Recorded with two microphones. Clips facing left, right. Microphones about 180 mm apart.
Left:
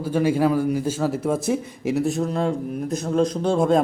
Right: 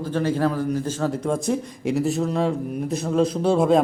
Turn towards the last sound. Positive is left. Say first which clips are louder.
# right 1 dB
turn(degrees=0)  # may be behind; listen again after turning